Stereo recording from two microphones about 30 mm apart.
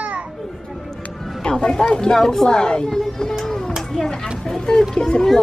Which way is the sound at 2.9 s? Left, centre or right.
Centre.